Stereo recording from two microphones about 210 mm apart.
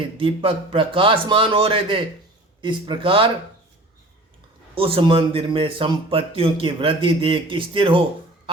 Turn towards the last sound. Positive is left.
turn(degrees=-25)  # may be behind; listen again after turning